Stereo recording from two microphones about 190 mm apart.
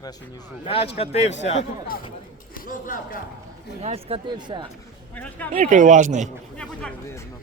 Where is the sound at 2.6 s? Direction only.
45° left (ahead or behind).